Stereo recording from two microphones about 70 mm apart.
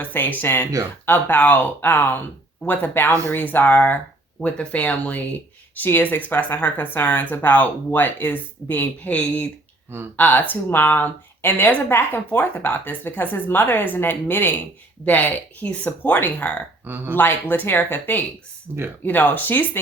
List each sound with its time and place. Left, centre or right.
0.0 s speech: left
9.0 s speech: left
16.8 s speech: right
17.2 s speech: left
18.7 s speech: right
19.0 s speech: left